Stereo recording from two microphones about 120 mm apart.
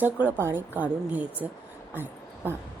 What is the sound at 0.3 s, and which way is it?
A woman's voice, 20° right (ahead or behind).